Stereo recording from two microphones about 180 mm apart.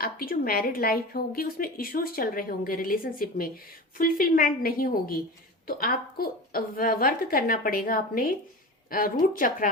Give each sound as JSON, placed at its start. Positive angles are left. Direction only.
{"t": 0.0, "sound": "a woman's voice", "side_deg": 55}